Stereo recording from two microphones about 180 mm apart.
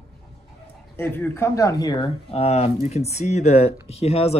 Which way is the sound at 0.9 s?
10° left (ahead or behind).